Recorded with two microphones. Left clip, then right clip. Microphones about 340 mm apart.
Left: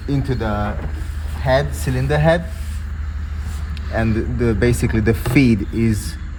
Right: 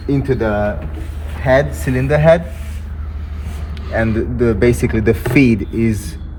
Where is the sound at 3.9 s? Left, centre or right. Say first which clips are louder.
Right 4 dB; left.